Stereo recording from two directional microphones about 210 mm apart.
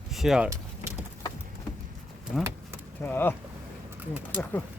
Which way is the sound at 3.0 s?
10° left (ahead or behind).